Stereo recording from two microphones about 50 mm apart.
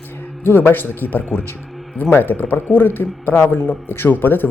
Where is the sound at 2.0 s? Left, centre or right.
Left.